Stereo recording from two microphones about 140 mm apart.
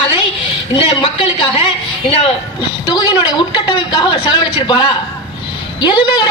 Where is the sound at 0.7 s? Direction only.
40° left (ahead or behind).